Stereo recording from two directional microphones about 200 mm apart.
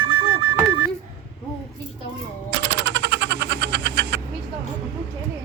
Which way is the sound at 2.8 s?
60° right (ahead or behind).